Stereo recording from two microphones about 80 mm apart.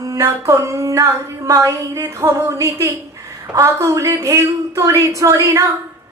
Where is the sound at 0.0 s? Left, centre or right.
Right.